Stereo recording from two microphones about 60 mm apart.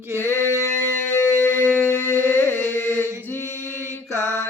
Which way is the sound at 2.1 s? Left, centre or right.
Right.